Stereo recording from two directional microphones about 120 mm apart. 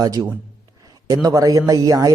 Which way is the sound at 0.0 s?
30° right (ahead or behind).